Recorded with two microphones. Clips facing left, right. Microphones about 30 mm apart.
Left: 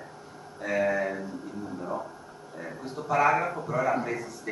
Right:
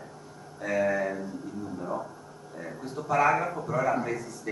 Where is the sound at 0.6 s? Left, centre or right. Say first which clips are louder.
Even; centre.